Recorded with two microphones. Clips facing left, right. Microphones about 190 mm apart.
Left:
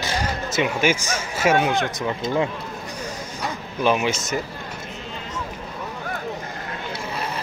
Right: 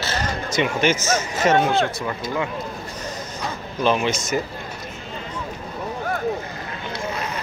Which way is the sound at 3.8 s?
10° left (ahead or behind).